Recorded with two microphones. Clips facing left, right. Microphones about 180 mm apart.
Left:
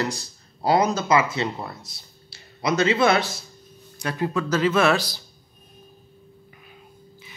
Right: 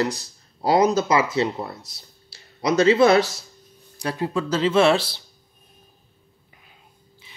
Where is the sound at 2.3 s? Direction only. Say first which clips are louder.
Right 3 dB; 35° right (ahead or behind).